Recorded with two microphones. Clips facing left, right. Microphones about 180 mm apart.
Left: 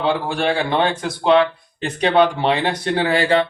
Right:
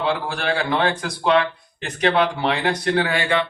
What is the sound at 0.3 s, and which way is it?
Speech, 25° left (ahead or behind).